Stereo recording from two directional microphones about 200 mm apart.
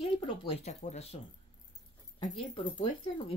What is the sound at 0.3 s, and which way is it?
Speech, 25° left (ahead or behind).